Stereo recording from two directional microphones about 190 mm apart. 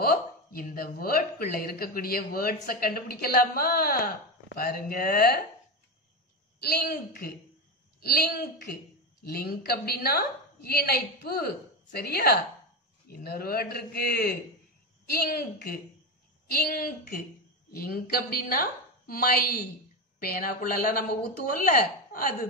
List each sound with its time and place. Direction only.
0.0 s speech: 50° left (ahead or behind)
6.6 s a man's voice: 55° left (ahead or behind)